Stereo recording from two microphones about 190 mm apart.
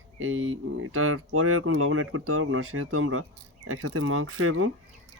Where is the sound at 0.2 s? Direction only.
90° right.